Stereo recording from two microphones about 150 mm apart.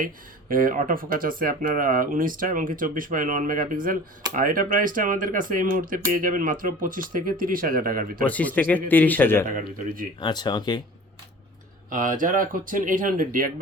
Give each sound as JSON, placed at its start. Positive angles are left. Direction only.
{"t": 0.0, "sound": "speech", "side_deg": -70}
{"t": 8.3, "sound": "a man's voice", "side_deg": 10}
{"t": 9.5, "sound": "speech", "side_deg": -65}
{"t": 10.2, "sound": "speech", "side_deg": 30}
{"t": 11.9, "sound": "speech", "side_deg": -65}